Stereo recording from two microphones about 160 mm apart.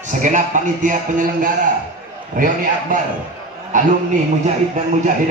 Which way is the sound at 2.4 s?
55° right (ahead or behind).